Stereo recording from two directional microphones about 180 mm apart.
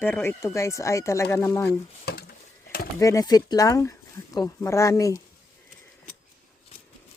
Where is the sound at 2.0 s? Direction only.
65° left (ahead or behind).